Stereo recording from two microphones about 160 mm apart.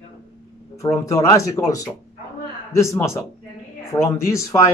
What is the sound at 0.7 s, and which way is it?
Speech, 20° left (ahead or behind).